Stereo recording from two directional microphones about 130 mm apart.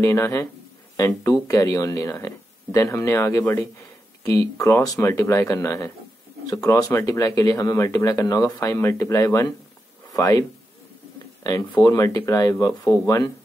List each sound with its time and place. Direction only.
0.0 s speech: 25° left (ahead or behind)
11.4 s speech: 30° left (ahead or behind)